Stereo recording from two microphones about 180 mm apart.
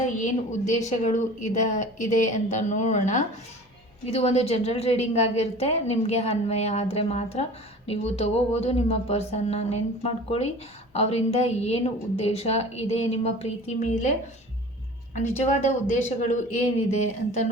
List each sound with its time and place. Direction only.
0.2 s a woman's voice: 40° left (ahead or behind)
15.4 s a woman's voice: 40° left (ahead or behind)